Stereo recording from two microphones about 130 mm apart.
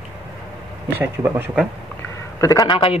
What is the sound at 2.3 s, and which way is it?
Speech, 25° left (ahead or behind).